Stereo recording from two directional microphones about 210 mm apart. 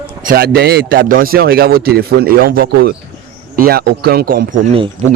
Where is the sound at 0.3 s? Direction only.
45° right (ahead or behind).